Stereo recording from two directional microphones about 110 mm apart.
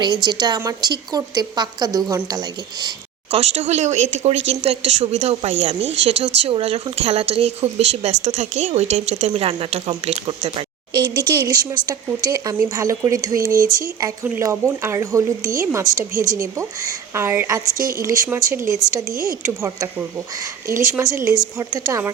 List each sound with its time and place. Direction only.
0.0 s a woman's voice: 40° right (ahead or behind)
3.3 s speech: 85° right
9.3 s speech: 50° right (ahead or behind)
11.4 s a woman's voice: 35° right (ahead or behind)